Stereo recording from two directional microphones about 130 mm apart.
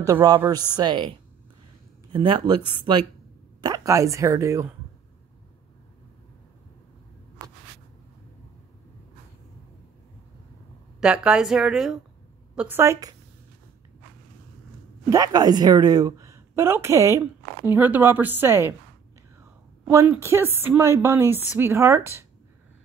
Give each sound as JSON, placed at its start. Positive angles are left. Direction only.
{"t": 0.0, "sound": "speech", "side_deg": -25}
{"t": 2.1, "sound": "speech", "side_deg": -40}
{"t": 3.6, "sound": "speech", "side_deg": -25}
{"t": 11.0, "sound": "a woman's voice", "side_deg": -5}
{"t": 12.5, "sound": "speech", "side_deg": -15}
{"t": 15.0, "sound": "a woman's voice", "side_deg": -30}
{"t": 19.9, "sound": "speech", "side_deg": -20}